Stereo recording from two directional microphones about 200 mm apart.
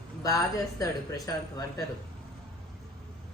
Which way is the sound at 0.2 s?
15° left (ahead or behind).